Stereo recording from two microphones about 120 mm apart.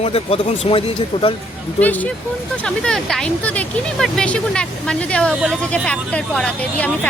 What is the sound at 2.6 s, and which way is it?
Speech, 5° left (ahead or behind).